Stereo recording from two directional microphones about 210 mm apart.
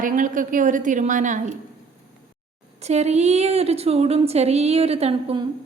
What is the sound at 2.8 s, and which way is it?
A woman's voice, 30° right (ahead or behind).